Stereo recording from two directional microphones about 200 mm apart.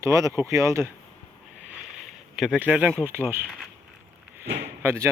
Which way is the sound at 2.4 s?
5° right (ahead or behind).